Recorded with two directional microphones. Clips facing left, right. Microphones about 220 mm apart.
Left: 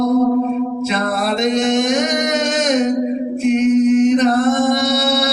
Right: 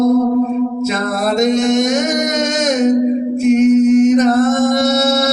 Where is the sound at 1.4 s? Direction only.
45° right (ahead or behind).